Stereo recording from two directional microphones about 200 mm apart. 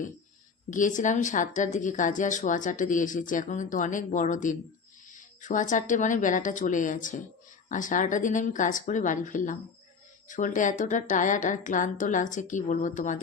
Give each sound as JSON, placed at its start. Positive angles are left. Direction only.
{"t": 0.7, "sound": "speech", "side_deg": 40}